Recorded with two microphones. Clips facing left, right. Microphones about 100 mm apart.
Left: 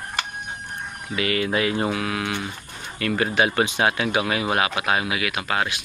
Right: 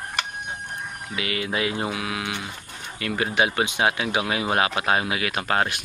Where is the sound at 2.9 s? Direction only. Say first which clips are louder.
Left 2 dB; 15° right (ahead or behind).